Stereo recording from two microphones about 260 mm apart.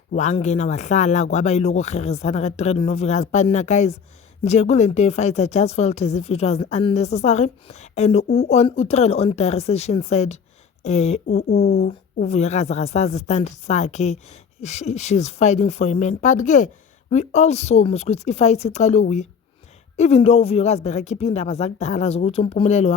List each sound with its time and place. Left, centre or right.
0.1 s speech: left
11.4 s speech: left